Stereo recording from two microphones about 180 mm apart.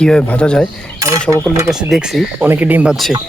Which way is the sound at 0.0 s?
5° left (ahead or behind).